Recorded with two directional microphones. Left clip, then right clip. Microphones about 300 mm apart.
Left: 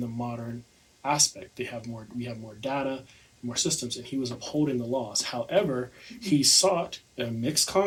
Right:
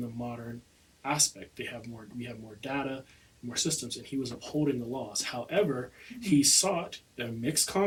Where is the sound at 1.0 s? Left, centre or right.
Centre.